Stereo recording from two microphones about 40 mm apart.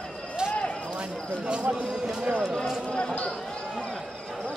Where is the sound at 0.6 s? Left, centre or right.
Left.